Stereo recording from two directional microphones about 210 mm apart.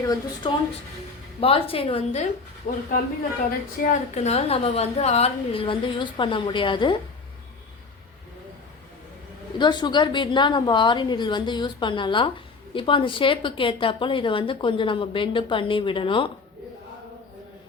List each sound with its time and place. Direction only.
0.0 s a woman's voice: 15° left (ahead or behind)
2.7 s a woman's voice: 40° left (ahead or behind); by 6.9 s 25° left (ahead or behind)
9.6 s a woman's voice: 20° left (ahead or behind)